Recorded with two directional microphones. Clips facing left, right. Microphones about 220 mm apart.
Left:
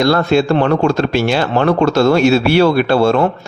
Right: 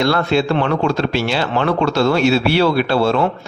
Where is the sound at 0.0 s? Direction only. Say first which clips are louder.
Left 4 dB; 40° left (ahead or behind).